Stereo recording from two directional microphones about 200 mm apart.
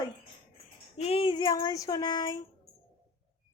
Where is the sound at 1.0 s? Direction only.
25° left (ahead or behind).